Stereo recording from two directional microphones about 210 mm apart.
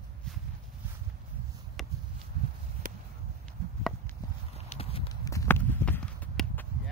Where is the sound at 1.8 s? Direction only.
Centre (ahead or behind).